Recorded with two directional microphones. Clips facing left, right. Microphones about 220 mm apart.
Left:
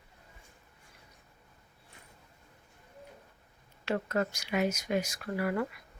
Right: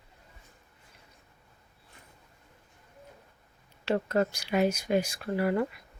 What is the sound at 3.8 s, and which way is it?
Speech, 30° right (ahead or behind).